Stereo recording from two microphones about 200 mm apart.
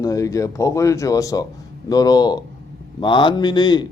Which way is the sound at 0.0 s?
15° left (ahead or behind).